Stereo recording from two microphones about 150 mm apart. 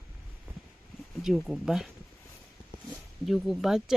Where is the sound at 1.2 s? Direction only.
Centre (ahead or behind).